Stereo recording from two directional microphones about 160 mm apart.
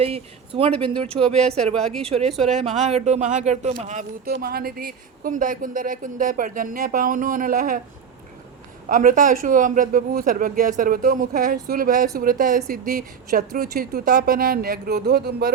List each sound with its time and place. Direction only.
0.0 s speech: 40° right (ahead or behind)
1.5 s speech: centre (ahead or behind)
2.0 s speech: 40° right (ahead or behind)
3.8 s a woman's voice: 60° right (ahead or behind)
8.9 s a woman's voice: 55° right (ahead or behind); by 15.5 s 85° right